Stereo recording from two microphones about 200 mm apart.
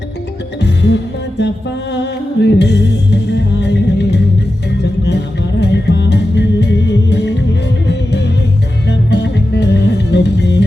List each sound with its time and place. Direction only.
0.6 s music: 60° left (ahead or behind)
8.9 s music: 60° left (ahead or behind)